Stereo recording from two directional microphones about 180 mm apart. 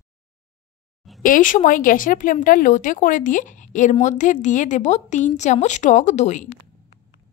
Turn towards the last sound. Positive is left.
turn(degrees=40)  # may be behind; listen again after turning